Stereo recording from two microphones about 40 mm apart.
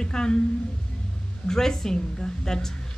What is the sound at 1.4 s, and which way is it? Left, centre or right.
A woman's voice, centre.